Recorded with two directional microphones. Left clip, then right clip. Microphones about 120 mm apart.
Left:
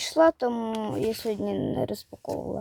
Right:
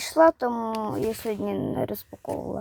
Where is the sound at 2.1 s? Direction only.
5° left (ahead or behind).